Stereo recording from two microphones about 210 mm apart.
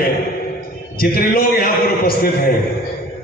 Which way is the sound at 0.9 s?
45° left (ahead or behind).